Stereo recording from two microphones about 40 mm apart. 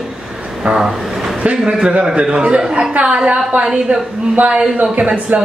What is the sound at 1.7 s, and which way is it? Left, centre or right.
A man's voice, right.